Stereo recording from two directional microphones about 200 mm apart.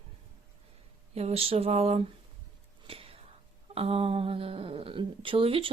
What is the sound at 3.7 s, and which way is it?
Speech, 30° right (ahead or behind).